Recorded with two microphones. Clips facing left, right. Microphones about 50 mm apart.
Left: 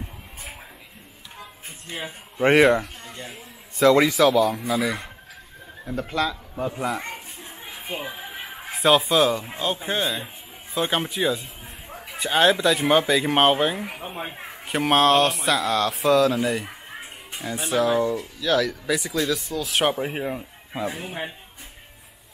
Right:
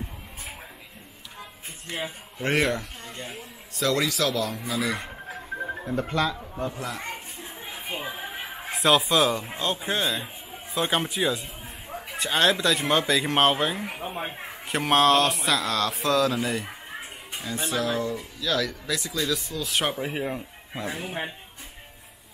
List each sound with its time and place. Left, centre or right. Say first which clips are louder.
1.9 s speech: right 1 dB; centre
2.8 s a sound: left 2 dB; centre
3.8 s a man's voice: left 8 dB; centre
4.3 s speech: left 8 dB; centre
6.7 s a man's voice: left 7 dB; centre
7.0 s a child's voice: left 1 dB; centre